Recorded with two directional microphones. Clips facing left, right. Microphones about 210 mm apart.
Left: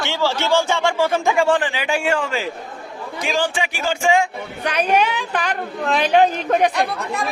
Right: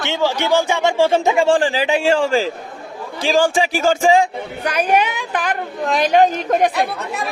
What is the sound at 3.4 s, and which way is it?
Speech, 45° right (ahead or behind).